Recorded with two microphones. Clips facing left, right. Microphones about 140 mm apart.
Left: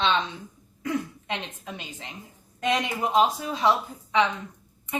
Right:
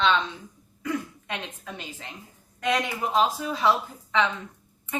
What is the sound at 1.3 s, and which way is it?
A woman's voice, 20° left (ahead or behind).